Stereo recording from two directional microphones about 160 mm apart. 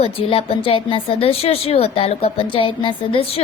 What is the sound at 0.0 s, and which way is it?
A woman's voice, 35° left (ahead or behind).